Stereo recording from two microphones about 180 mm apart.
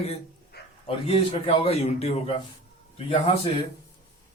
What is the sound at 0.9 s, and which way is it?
A man's voice, 35° left (ahead or behind).